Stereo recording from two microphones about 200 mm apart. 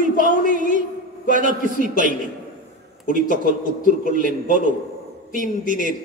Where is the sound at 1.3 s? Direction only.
40° right (ahead or behind).